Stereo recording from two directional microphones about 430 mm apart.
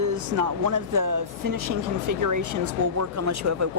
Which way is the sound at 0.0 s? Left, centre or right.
Right.